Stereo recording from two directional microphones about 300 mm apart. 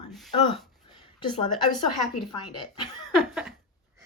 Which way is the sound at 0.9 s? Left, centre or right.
Centre.